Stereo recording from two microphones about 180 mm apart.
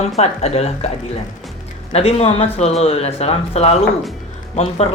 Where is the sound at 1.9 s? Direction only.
35° left (ahead or behind).